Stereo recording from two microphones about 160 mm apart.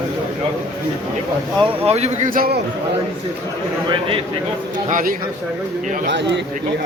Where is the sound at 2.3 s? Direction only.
65° right (ahead or behind).